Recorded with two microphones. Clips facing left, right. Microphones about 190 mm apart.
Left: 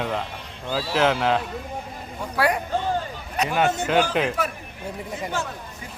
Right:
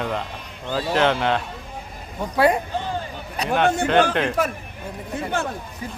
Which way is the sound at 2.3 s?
25° right (ahead or behind).